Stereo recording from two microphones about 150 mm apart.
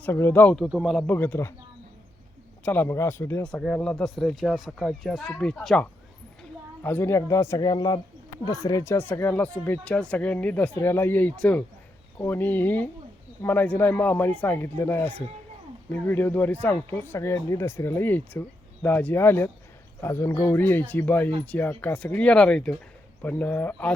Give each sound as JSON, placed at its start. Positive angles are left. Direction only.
{"t": 0.0, "sound": "speech", "side_deg": 15}
{"t": 1.1, "sound": "speech", "side_deg": 15}
{"t": 2.6, "sound": "speech", "side_deg": 15}